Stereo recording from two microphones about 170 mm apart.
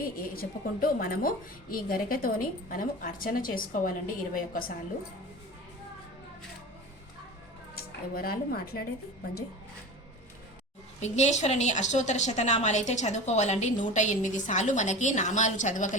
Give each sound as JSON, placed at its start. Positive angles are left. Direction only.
{"t": 0.0, "sound": "a woman's voice", "side_deg": 60}
{"t": 8.1, "sound": "a woman's voice", "side_deg": 60}
{"t": 11.0, "sound": "a woman's voice", "side_deg": 40}